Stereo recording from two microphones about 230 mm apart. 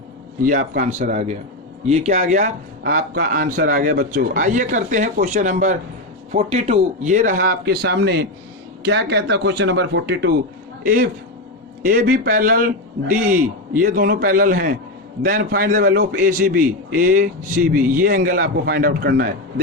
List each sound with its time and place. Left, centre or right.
0.6 s a man's voice: right
0.9 s a man's voice: right